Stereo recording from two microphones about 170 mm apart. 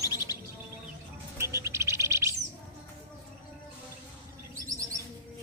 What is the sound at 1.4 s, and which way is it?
Bird, 15° right (ahead or behind).